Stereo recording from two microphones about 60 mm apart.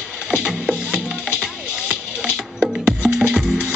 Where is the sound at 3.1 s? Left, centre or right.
Centre.